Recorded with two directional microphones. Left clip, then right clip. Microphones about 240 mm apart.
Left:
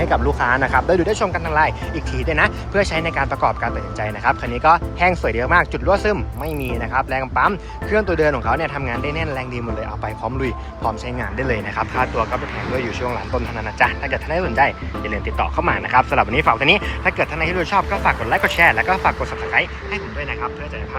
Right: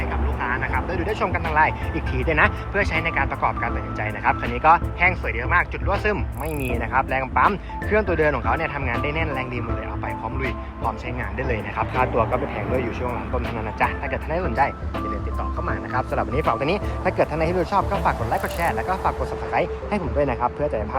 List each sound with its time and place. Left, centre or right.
0.1 s speech: centre
11.2 s speech: centre